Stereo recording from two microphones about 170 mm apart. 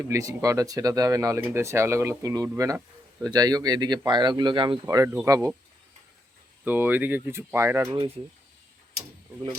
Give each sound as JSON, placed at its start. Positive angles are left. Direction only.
{"t": 0.1, "sound": "speech", "side_deg": -20}
{"t": 4.9, "sound": "speech", "side_deg": -15}
{"t": 6.7, "sound": "speech", "side_deg": -10}